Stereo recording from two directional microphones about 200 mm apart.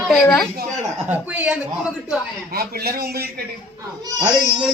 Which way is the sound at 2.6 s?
50° right (ahead or behind).